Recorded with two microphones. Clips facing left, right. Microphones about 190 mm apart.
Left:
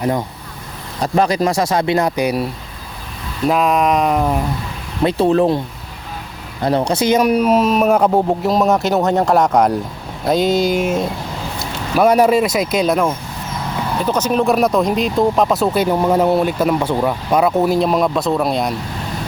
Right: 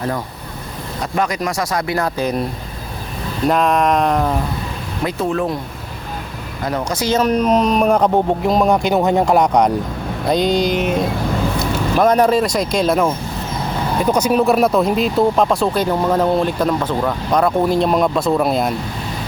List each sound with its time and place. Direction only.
1.0 s speech: 30° left (ahead or behind); by 4.4 s 5° left (ahead or behind)
5.0 s speech: 30° left (ahead or behind)
6.9 s speech: 20° left (ahead or behind); by 18.7 s centre (ahead or behind)